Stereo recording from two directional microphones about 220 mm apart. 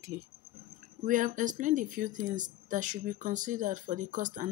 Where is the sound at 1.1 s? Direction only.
35° right (ahead or behind).